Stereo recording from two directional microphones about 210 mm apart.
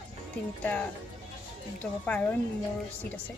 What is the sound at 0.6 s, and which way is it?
Speech, 5° left (ahead or behind).